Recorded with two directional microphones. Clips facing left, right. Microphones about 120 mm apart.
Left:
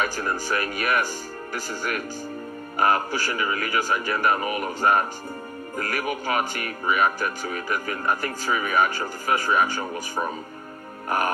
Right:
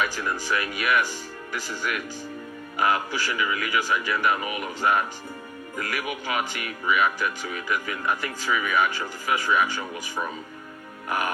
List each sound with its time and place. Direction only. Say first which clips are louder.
0.0 s speech: left 1 dB; 45° left (ahead or behind)